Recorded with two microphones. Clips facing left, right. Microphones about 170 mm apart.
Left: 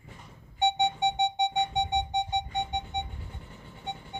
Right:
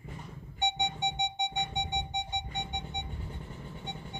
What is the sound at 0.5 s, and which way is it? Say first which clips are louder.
Music: left 7 dB; 30° left (ahead or behind).